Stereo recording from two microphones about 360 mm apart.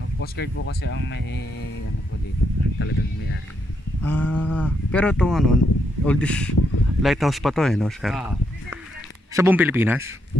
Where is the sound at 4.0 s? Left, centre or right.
Centre.